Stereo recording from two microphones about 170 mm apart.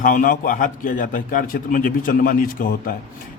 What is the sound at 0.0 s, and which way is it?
A man's voice, 55° left (ahead or behind).